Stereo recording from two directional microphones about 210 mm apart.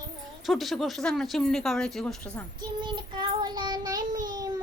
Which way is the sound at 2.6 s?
20° right (ahead or behind).